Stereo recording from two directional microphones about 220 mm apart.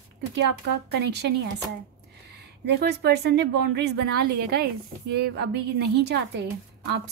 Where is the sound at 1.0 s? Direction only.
50° right (ahead or behind).